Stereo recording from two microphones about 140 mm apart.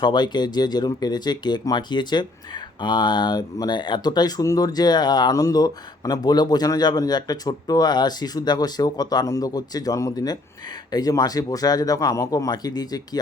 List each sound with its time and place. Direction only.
0.0 s speech: 30° left (ahead or behind)